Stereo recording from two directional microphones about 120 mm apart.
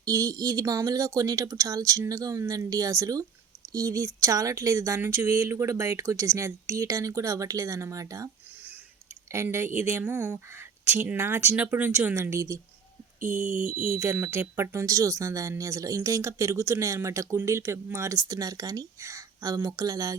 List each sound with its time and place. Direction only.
0.0 s speech: 30° right (ahead or behind)
9.3 s a woman's voice: 20° right (ahead or behind)
13.6 s speech: 20° right (ahead or behind)